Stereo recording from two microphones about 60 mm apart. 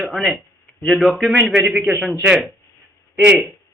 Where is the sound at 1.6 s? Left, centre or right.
Centre.